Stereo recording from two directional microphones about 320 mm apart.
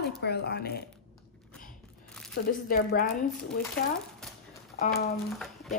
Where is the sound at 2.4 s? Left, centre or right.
Left.